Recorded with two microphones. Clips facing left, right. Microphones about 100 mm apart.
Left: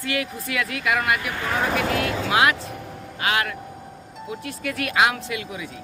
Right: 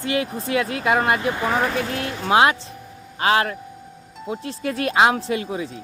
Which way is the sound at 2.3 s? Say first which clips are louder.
Right 6 dB; 30° right (ahead or behind).